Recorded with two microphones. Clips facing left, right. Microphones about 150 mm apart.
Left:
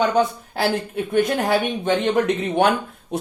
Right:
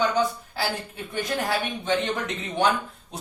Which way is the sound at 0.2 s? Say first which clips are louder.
Left 5 dB; 55° left (ahead or behind).